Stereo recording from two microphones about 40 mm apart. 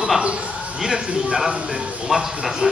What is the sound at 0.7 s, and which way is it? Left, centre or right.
A man's voice, centre.